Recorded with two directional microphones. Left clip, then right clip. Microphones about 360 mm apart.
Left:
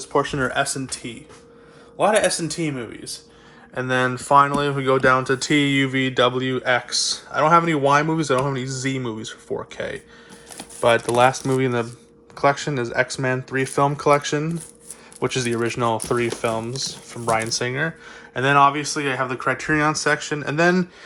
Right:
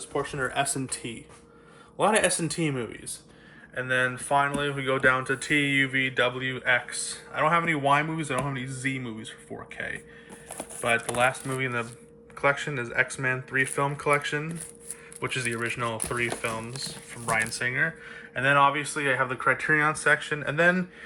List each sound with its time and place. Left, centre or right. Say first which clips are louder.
0.0 s speech: left 8 dB; left
0.5 s speech: left 5 dB; centre
3.8 s speech: left 5 dB; centre
10.6 s speech: left 8 dB; centre